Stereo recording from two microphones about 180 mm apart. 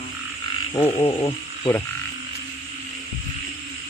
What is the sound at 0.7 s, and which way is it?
Frog, 25° left (ahead or behind).